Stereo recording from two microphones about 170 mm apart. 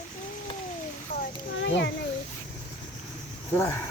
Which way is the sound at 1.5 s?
90° left.